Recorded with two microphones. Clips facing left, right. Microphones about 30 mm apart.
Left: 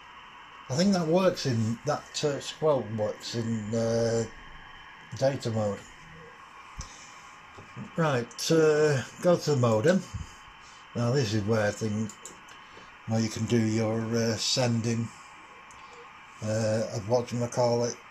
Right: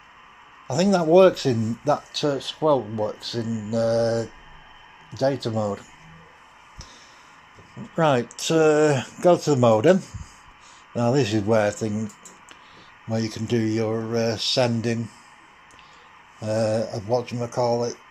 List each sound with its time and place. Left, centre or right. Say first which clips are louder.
0.7 s speech: right 6 dB; right
1.9 s speech: right 8 dB; right
3.4 s mantra: right 3 dB; left
3.7 s speech: right 6 dB; right
7.7 s speech: right 7 dB; right
13.1 s speech: right 3 dB; right
14.1 s speech: right 8 dB; right
16.3 s speech: right 5 dB; right